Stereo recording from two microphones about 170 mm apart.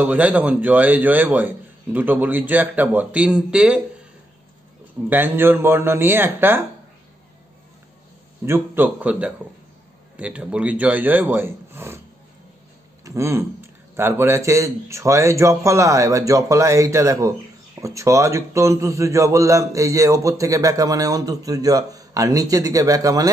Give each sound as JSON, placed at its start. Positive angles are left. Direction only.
{"t": 0.0, "sound": "a man's voice", "side_deg": -10}
{"t": 5.1, "sound": "a man's voice", "side_deg": -10}
{"t": 8.5, "sound": "a man's voice", "side_deg": -15}
{"t": 13.0, "sound": "a man's voice", "side_deg": -20}